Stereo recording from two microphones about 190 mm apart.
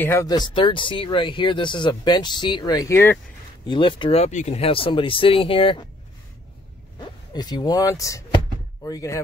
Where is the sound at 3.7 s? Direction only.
25° left (ahead or behind).